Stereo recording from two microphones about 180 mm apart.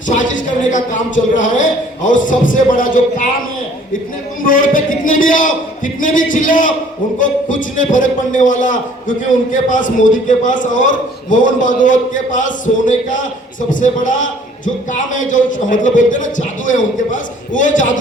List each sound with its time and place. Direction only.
0.1 s a man's voice: 45° left (ahead or behind)
4.4 s a man's voice: 50° left (ahead or behind)